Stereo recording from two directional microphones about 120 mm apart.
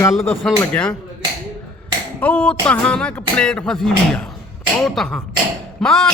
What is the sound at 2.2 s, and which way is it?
A man's voice, 10° left (ahead or behind).